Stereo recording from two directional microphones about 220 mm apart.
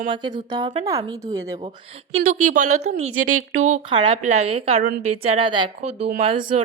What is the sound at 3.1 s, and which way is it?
Speech, 75° right (ahead or behind).